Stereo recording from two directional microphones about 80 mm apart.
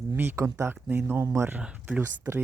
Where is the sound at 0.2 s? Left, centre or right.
Right.